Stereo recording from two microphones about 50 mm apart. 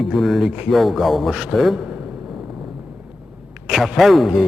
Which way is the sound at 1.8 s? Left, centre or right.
Right.